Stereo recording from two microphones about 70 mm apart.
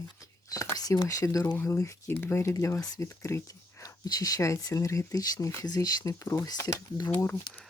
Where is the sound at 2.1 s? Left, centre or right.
Left.